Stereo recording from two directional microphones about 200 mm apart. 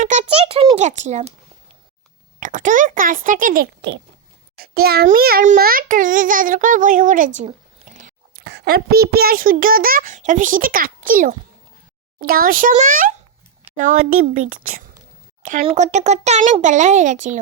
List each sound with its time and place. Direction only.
0.0 s a child's voice: 35° right (ahead or behind)
2.4 s a child's voice: 40° right (ahead or behind); by 4.0 s 60° right (ahead or behind)
4.5 s a child's voice: 50° right (ahead or behind)
7.8 s biting: 30° right (ahead or behind)
8.4 s a child's voice: 55° right (ahead or behind)